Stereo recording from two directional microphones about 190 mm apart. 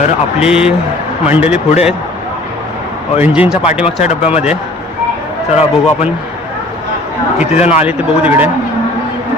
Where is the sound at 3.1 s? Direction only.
10° right (ahead or behind).